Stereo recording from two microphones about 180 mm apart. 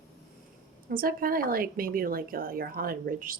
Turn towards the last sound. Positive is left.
turn(degrees=-50)  # may be behind; listen again after turning